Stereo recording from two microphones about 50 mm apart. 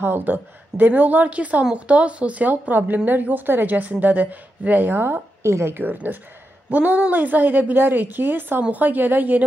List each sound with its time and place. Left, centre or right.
0.0 s a woman's voice: right
5.4 s speech: right
5.7 s a woman's voice: right
6.7 s a woman's voice: right